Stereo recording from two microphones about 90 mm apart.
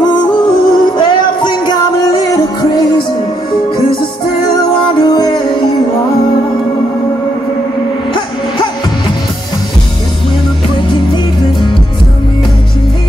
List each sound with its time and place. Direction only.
0.0 s music: 55° left (ahead or behind)
4.8 s music: 55° left (ahead or behind)
8.1 s music: 55° left (ahead or behind)